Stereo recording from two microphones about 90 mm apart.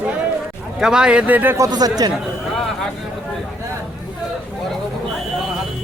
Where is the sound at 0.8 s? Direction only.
10° right (ahead or behind).